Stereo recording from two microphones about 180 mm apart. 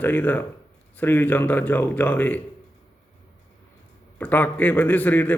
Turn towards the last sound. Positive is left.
turn(degrees=10)  # may be behind; listen again after turning